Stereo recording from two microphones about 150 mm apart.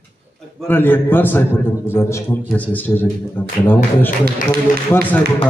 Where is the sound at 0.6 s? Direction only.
15° left (ahead or behind).